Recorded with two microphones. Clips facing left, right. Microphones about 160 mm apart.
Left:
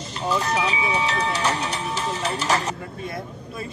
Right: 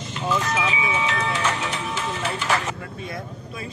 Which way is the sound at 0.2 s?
35° left (ahead or behind).